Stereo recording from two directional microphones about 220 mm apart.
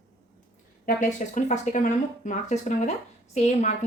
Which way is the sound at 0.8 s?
35° left (ahead or behind).